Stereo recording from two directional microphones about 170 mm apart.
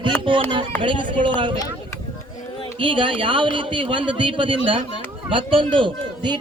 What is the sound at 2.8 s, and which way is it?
A man's voice, 30° right (ahead or behind).